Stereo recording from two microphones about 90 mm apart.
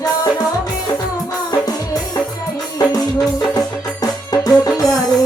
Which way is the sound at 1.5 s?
45° left (ahead or behind).